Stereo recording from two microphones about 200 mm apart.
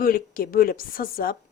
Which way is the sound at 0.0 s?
45° left (ahead or behind).